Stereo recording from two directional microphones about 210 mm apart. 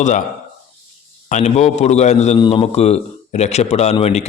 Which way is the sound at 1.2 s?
35° left (ahead or behind).